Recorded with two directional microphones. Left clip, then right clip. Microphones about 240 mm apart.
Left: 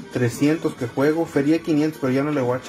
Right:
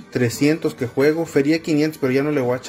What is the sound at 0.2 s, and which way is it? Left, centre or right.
Speech, right.